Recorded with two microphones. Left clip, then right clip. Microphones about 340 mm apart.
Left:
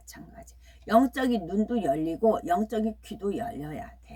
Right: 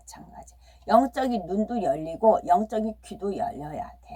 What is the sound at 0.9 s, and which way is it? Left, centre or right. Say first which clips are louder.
Speech: right 2 dB; centre.